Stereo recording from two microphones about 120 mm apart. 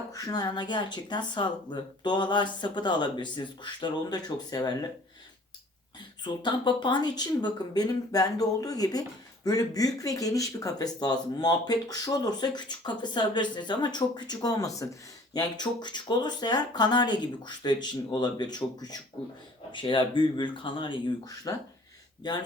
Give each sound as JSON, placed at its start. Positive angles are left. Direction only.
{"t": 0.1, "sound": "speech", "side_deg": 30}
{"t": 6.2, "sound": "speech", "side_deg": 40}
{"t": 21.5, "sound": "speech", "side_deg": 30}